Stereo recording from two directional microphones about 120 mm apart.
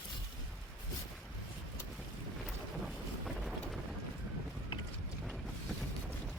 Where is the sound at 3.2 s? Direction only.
Centre (ahead or behind).